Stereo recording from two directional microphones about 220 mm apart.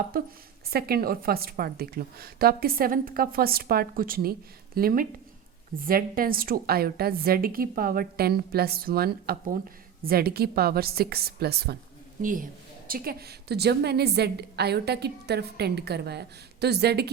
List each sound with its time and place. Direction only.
0.1 s a woman's voice: 40° right (ahead or behind)